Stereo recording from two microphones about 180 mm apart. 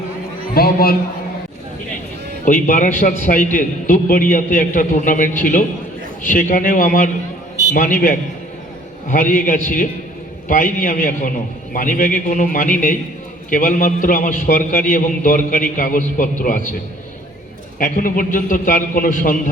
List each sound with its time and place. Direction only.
0.5 s a sound: 55° left (ahead or behind)
2.4 s a man's voice: 45° left (ahead or behind)
17.7 s a man's voice: 50° left (ahead or behind)